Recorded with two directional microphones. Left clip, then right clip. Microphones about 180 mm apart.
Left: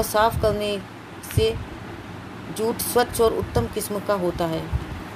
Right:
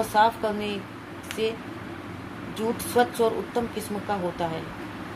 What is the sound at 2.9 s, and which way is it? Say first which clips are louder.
Speech: left 2 dB; 55° left (ahead or behind).